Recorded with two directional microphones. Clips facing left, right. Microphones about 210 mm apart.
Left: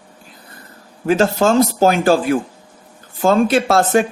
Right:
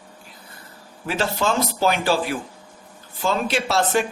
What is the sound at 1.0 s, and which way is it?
Speech, 45° left (ahead or behind).